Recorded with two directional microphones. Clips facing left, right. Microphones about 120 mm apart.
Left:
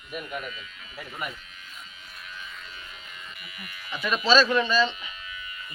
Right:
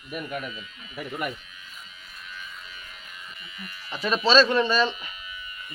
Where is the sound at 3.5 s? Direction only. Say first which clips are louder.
Right 1 dB; 30° right (ahead or behind).